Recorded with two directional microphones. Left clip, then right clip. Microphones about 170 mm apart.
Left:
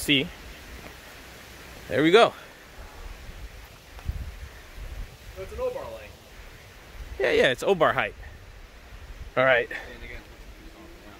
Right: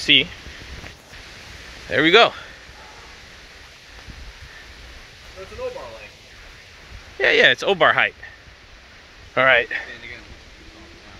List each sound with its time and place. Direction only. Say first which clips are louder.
0.0 s speech: right 8 dB; 20° left (ahead or behind)
1.9 s speech: right 4 dB; 5° left (ahead or behind)
7.2 s speech: right 7 dB; 5° left (ahead or behind)
9.3 s speech: right 5 dB; centre (ahead or behind)